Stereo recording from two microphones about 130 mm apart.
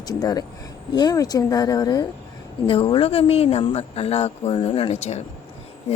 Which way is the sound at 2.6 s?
45° left (ahead or behind).